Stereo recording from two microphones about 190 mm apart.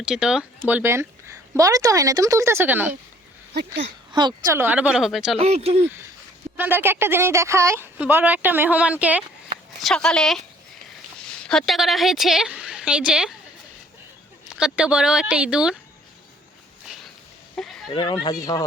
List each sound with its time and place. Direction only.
0.0 s speech: 5° right (ahead or behind)
3.5 s speech: 60° right (ahead or behind)
4.1 s a woman's voice: 25° right (ahead or behind)
4.5 s speech: 10° right (ahead or behind)
5.4 s speech: 35° right (ahead or behind)
6.6 s speech: 10° right (ahead or behind)
9.8 s a woman's voice: 5° left (ahead or behind)
14.5 s speech: 5° right (ahead or behind)
17.5 s a sound: 5° left (ahead or behind)
17.9 s speech: 25° left (ahead or behind)